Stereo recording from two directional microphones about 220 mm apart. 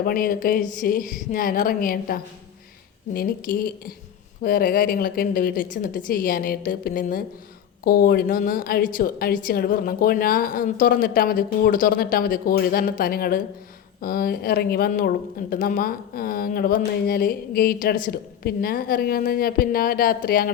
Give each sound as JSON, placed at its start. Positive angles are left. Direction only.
{"t": 0.0, "sound": "speech", "side_deg": 40}